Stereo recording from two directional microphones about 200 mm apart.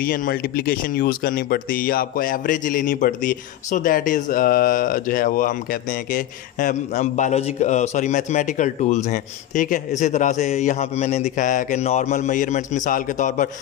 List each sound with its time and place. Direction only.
0.0 s speech: 45° left (ahead or behind)